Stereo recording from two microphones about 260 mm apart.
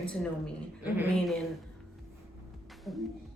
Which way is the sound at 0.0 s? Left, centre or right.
Centre.